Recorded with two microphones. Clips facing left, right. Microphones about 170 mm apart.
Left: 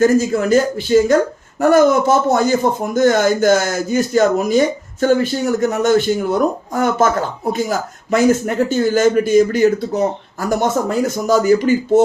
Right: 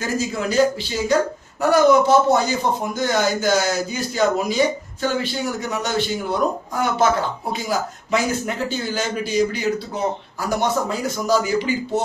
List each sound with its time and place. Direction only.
0.0 s speech: 50° left (ahead or behind)